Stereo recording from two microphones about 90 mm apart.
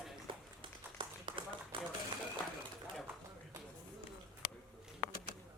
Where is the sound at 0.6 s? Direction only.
65° right (ahead or behind).